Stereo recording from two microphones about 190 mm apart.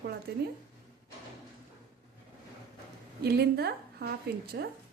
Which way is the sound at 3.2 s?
55° right (ahead or behind).